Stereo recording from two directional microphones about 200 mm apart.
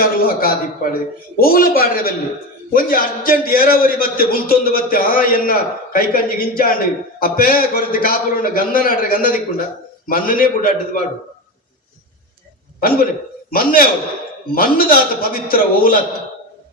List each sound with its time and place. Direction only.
0.0 s a man's voice: 45° left (ahead or behind)
13.5 s a man's voice: 45° left (ahead or behind)